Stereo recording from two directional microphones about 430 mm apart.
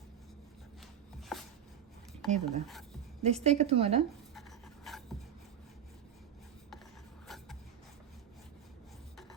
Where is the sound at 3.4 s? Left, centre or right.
Centre.